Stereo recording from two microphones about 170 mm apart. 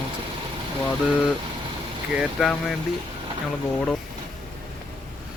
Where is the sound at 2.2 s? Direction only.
Centre (ahead or behind).